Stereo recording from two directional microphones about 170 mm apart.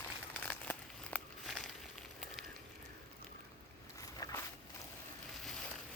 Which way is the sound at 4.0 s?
20° left (ahead or behind).